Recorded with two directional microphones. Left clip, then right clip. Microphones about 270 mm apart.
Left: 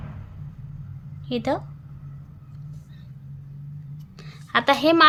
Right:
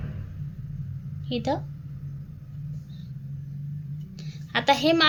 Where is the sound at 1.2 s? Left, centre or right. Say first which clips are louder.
Left 3 dB; left.